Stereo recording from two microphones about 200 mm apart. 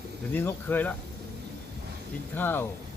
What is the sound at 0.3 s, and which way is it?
Speech, 10° left (ahead or behind).